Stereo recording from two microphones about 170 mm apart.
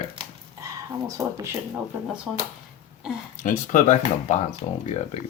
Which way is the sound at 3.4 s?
45° left (ahead or behind).